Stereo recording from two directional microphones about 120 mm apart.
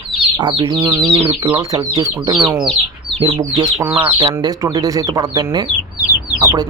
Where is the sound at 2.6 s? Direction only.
Centre (ahead or behind).